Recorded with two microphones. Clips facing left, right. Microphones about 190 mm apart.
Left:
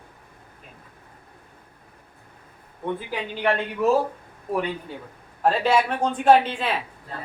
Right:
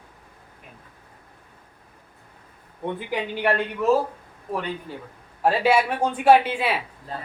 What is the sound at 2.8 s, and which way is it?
Speech, 15° right (ahead or behind).